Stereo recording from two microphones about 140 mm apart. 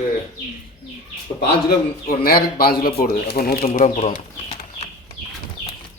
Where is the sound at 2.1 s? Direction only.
90° left.